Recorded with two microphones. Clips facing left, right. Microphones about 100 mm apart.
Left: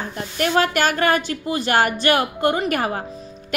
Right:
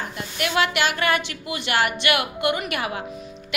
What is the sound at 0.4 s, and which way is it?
A woman's voice, 40° left (ahead or behind).